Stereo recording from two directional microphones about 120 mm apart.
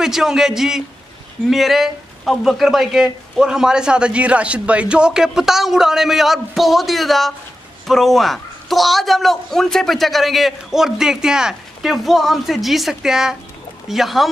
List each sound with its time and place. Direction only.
0.0 s a man's voice: 5° right (ahead or behind)